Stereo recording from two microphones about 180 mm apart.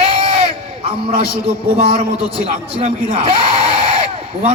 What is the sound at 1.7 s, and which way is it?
A man's voice, 30° right (ahead or behind).